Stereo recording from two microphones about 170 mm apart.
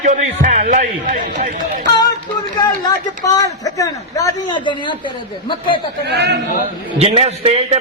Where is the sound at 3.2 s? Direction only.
20° left (ahead or behind).